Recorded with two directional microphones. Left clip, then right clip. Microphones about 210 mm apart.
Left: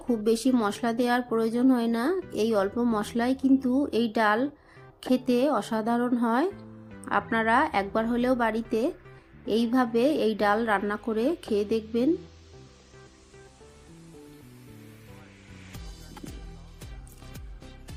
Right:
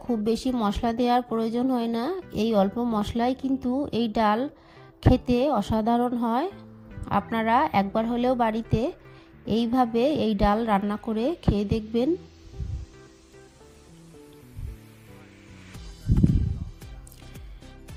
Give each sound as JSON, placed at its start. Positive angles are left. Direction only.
{"t": 0.1, "sound": "a woman's voice", "side_deg": -45}